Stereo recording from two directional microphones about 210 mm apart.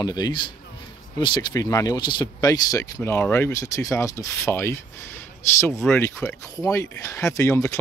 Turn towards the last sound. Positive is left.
turn(degrees=15)  # may be behind; listen again after turning